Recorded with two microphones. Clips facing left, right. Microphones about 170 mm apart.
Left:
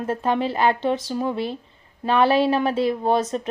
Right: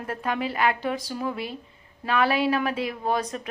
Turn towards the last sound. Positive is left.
turn(degrees=30)  # may be behind; listen again after turning